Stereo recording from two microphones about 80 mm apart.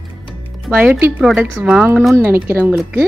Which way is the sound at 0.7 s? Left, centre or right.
Centre.